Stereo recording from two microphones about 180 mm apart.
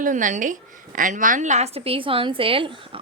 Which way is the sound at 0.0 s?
45° right (ahead or behind).